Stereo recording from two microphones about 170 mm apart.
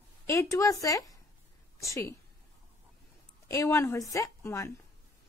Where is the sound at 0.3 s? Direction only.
15° left (ahead or behind).